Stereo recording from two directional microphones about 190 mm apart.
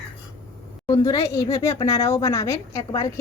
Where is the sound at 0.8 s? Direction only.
20° left (ahead or behind).